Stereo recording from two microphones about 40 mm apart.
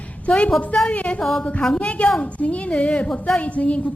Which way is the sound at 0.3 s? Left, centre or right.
Left.